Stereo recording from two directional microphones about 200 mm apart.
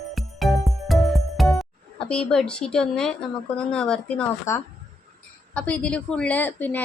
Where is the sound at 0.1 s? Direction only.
Centre (ahead or behind).